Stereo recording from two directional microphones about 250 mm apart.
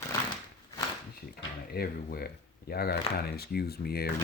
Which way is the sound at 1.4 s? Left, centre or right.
Left.